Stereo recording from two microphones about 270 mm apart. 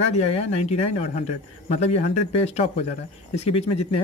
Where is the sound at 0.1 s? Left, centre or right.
Left.